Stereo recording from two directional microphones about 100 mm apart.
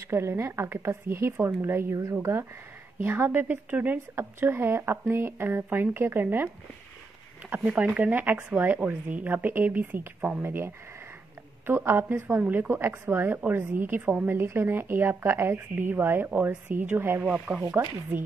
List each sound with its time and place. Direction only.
0.1 s a woman's voice: 25° right (ahead or behind)
3.0 s a woman's voice: 20° right (ahead or behind)